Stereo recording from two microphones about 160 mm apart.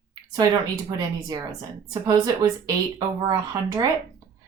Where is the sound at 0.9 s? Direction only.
20° right (ahead or behind).